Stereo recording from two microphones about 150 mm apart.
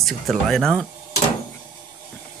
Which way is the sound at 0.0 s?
Centre (ahead or behind).